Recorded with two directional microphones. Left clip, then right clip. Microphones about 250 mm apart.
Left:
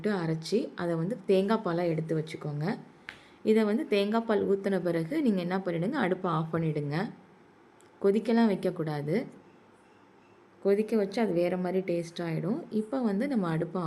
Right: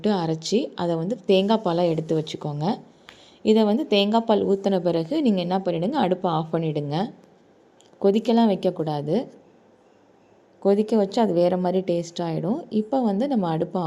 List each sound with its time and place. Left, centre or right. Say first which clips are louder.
0.0 s a woman's voice: right 7 dB; centre
10.6 s a woman's voice: right 6 dB; centre